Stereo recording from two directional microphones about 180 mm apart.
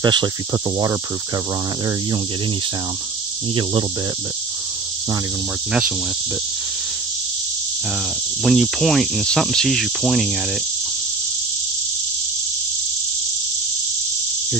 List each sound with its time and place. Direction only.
0.0 s speech: 25° right (ahead or behind)
5.7 s cricket: 5° right (ahead or behind)
8.5 s cricket: centre (ahead or behind)